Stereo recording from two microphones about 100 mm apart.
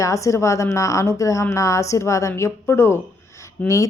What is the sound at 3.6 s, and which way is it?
Speech, 15° left (ahead or behind).